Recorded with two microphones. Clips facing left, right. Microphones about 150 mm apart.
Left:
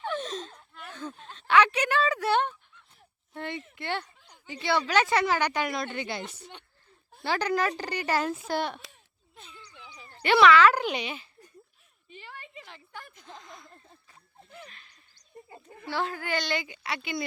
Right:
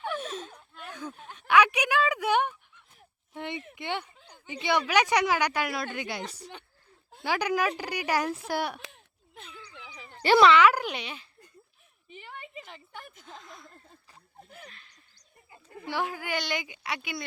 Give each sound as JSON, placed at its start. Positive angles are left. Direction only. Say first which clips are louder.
{"t": 0.1, "sound": "a sound", "louder": "left 1 dB", "side_deg": -10}
{"t": 3.3, "sound": "a woman's voice", "louder": "even", "side_deg": -20}
{"t": 7.3, "sound": "a woman's voice", "louder": "even", "side_deg": -10}
{"t": 8.9, "sound": "a sound", "louder": "right 4 dB", "side_deg": -70}
{"t": 10.2, "sound": "a child's voice", "louder": "right 1 dB", "side_deg": -35}
{"t": 10.5, "sound": "a woman's voice", "louder": "left 1 dB", "side_deg": -15}
{"t": 10.8, "sound": "a child's voice", "louder": "left 4 dB", "side_deg": 0}
{"t": 12.6, "sound": "speech", "louder": "right 1 dB", "side_deg": 0}
{"t": 15.8, "sound": "a woman's voice", "louder": "even", "side_deg": -15}